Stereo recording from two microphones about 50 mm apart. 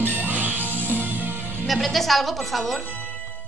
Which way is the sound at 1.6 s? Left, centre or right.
Centre.